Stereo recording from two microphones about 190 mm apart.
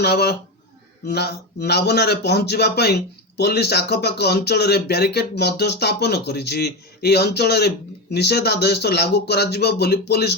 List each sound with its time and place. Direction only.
0.0 s speech: 60° left (ahead or behind)